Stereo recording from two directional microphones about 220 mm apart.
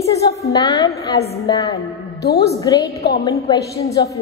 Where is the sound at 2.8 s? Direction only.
45° left (ahead or behind).